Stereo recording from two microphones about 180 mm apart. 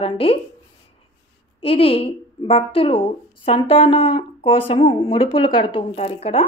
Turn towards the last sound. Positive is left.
turn(degrees=35)  # may be behind; listen again after turning